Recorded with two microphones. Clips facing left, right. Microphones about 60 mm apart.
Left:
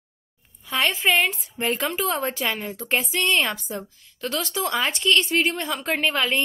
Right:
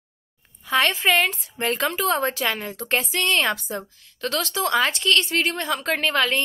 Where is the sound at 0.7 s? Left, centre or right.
Centre.